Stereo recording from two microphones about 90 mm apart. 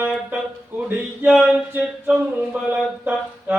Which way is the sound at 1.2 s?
10° right (ahead or behind).